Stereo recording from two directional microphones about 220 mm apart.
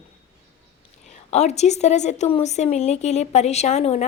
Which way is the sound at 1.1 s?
30° left (ahead or behind).